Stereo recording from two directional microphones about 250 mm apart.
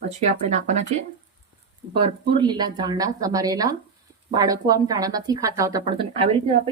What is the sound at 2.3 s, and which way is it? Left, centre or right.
Speech, centre.